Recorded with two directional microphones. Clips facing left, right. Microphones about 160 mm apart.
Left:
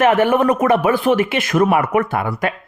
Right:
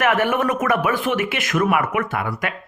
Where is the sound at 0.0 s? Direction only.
30° left (ahead or behind).